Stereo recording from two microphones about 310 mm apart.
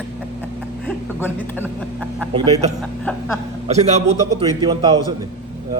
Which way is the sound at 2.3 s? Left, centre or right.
Centre.